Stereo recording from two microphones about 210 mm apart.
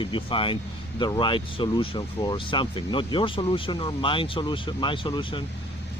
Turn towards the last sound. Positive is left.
turn(degrees=25)  # may be behind; listen again after turning